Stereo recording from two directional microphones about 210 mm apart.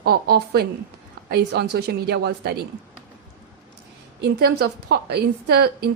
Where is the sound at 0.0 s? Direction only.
50° right (ahead or behind).